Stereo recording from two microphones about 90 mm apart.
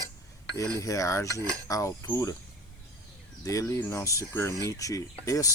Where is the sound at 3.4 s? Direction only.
40° left (ahead or behind).